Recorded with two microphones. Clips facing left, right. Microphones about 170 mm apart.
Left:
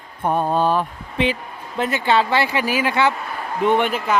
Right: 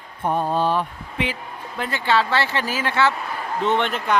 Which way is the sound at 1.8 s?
20° left (ahead or behind).